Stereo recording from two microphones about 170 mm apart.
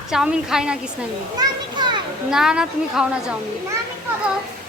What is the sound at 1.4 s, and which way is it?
Children playing, 25° right (ahead or behind).